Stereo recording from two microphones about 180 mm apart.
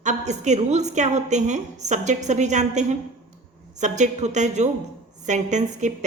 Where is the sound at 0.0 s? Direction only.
40° right (ahead or behind).